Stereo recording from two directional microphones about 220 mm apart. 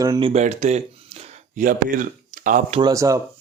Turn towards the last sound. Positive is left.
turn(degrees=-15)  # may be behind; listen again after turning